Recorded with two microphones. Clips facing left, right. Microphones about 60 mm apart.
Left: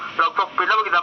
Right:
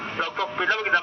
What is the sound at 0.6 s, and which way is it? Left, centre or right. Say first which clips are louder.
Radio: left 2 dB; left.